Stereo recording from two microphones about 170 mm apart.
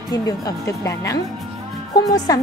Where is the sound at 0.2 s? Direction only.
20° left (ahead or behind).